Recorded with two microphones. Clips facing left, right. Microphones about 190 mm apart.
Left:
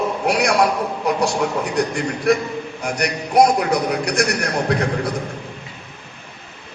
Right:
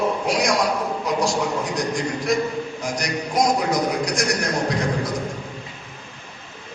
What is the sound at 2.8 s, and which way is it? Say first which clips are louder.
A man's voice: left 6 dB; 60° left (ahead or behind).